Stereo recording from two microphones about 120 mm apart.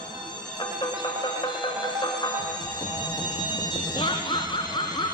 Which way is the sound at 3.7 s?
40° left (ahead or behind).